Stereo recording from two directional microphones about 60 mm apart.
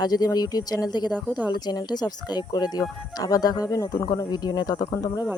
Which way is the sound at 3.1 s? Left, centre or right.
Left.